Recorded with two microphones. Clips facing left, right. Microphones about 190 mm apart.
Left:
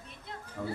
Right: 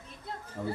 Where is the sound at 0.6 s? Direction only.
20° right (ahead or behind).